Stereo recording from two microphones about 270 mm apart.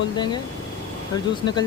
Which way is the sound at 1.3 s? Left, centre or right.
Centre.